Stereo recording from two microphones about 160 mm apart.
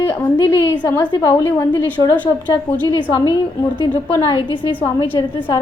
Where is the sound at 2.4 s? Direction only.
30° left (ahead or behind).